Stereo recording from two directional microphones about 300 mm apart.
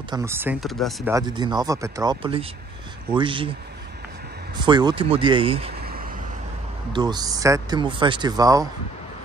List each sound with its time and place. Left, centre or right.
0.1 s speech: centre
1.1 s speech: centre
4.6 s speech: centre
5.8 s vehicle: right
6.9 s speech: centre